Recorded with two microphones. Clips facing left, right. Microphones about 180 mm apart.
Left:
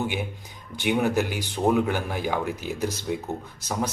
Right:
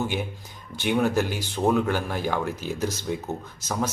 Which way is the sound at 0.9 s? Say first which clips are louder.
Even; 10° left (ahead or behind).